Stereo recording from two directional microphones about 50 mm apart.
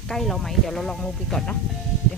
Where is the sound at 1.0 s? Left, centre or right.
Centre.